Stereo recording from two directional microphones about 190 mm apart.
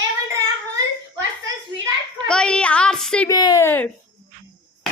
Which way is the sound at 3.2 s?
20° left (ahead or behind).